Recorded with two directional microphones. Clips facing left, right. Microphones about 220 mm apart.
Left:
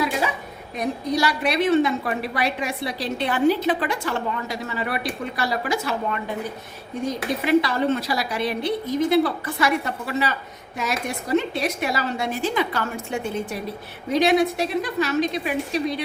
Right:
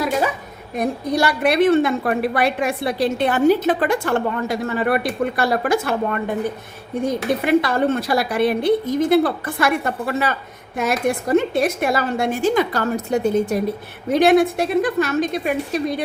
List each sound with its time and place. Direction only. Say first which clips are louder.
0.8 s a woman's voice: right 3 dB; 55° right (ahead or behind)
7.4 s a woman's voice: right 1 dB; 50° right (ahead or behind)
14.1 s a woman's voice: right 4 dB; 50° right (ahead or behind)